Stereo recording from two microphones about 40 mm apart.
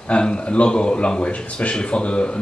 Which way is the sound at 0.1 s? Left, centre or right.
Left.